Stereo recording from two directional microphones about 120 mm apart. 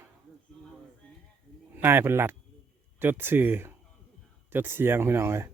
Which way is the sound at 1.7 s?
20° right (ahead or behind).